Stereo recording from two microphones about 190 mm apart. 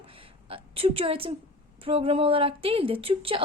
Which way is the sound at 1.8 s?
30° right (ahead or behind).